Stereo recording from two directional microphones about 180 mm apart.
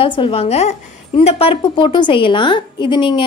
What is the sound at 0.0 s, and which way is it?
A woman's voice, 30° left (ahead or behind).